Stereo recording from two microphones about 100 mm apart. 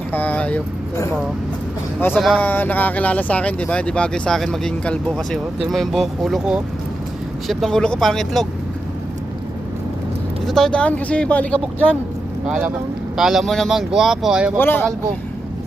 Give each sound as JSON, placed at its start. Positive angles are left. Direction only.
{"t": 0.1, "sound": "speech", "side_deg": 15}
{"t": 2.1, "sound": "speech", "side_deg": -5}
{"t": 2.4, "sound": "speech", "side_deg": 15}
{"t": 7.4, "sound": "speech", "side_deg": 5}
{"t": 10.4, "sound": "speech", "side_deg": 5}
{"t": 12.5, "sound": "speech", "side_deg": -15}
{"t": 14.6, "sound": "speech", "side_deg": 20}